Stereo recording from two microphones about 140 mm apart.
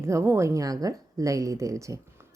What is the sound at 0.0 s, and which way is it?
A woman's voice, 20° right (ahead or behind).